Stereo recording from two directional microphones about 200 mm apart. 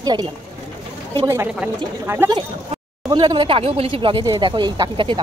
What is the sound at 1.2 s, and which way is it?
A woman's voice, 10° right (ahead or behind).